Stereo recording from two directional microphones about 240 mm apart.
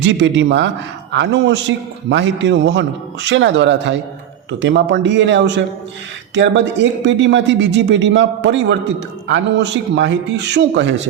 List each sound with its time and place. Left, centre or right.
0.0 s a man's voice: right